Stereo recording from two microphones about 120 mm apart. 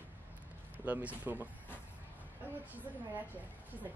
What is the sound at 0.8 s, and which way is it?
Speech, 10° right (ahead or behind).